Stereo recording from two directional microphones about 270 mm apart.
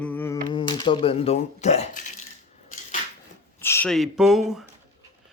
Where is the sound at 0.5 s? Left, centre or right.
Centre.